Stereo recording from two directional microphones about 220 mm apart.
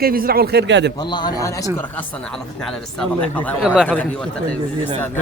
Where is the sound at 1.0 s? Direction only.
20° left (ahead or behind).